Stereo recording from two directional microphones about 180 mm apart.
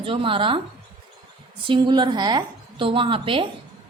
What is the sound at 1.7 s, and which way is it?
A woman's voice, 25° right (ahead or behind).